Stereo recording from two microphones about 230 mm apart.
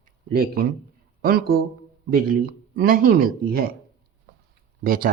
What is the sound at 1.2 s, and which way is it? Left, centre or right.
Speech, right.